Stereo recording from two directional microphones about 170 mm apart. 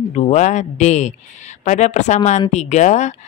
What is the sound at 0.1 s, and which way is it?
Speech, 40° left (ahead or behind).